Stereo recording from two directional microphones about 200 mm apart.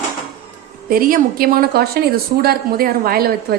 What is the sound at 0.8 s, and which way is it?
A woman's voice, 45° right (ahead or behind).